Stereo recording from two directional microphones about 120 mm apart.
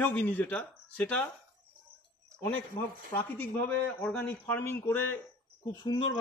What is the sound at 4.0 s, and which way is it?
A man's voice, 10° left (ahead or behind).